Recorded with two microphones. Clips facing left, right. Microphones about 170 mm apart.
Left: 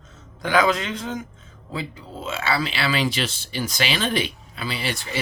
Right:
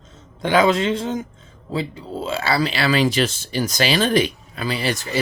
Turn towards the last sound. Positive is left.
turn(degrees=-40)  # may be behind; listen again after turning